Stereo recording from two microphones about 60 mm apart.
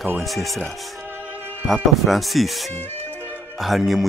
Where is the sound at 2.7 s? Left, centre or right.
Left.